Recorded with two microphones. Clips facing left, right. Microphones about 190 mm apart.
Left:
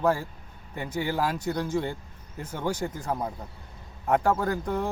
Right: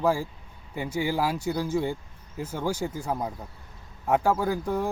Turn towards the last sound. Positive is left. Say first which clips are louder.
# right 1 dB
turn(degrees=-10)  # may be behind; listen again after turning